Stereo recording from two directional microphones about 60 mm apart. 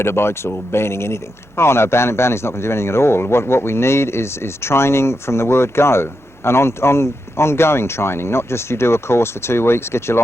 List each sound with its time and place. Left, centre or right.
0.0 s speech: left